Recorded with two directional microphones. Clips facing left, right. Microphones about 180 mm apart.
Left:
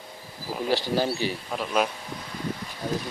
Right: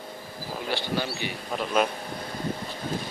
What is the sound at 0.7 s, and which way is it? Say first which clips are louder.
Speech: left 5 dB; 40° left (ahead or behind).